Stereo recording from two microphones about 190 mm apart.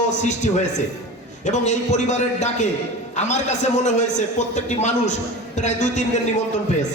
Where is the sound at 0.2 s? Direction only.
40° left (ahead or behind).